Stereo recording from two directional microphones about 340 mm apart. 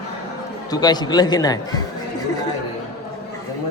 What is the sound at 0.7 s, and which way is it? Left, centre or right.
A man's voice, centre.